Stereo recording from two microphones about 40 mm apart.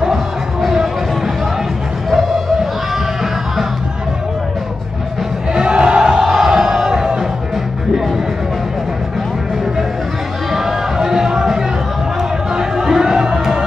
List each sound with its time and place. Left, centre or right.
5.5 s music: right
6.2 s music: centre
10.5 s music: centre